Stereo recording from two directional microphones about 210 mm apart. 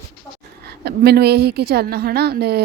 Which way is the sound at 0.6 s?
50° right (ahead or behind).